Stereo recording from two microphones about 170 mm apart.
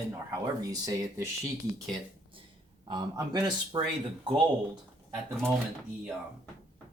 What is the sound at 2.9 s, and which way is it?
Speech, 25° right (ahead or behind).